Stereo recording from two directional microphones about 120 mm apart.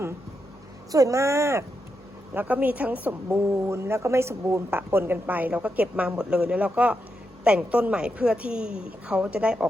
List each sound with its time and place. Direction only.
0.9 s a woman's voice: 30° right (ahead or behind); by 9.6 s 10° right (ahead or behind)